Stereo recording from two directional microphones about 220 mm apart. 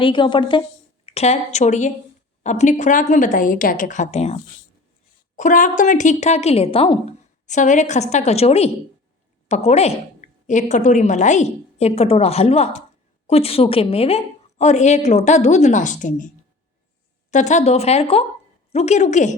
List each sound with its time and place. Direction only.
0.0 s a woman's voice: 20° left (ahead or behind)
5.4 s a woman's voice: 35° left (ahead or behind)
17.3 s a woman's voice: 35° left (ahead or behind)